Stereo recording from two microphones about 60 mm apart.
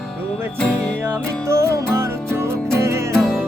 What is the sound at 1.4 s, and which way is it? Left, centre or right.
Music, right.